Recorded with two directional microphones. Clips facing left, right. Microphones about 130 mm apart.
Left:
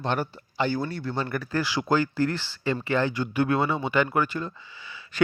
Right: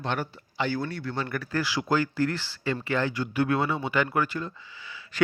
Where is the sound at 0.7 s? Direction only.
25° left (ahead or behind).